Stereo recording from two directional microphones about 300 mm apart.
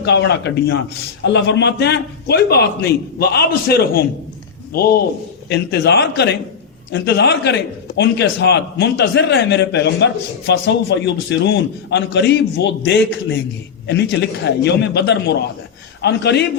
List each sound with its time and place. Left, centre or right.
0.0 s a man's voice: left
5.5 s a man's voice: left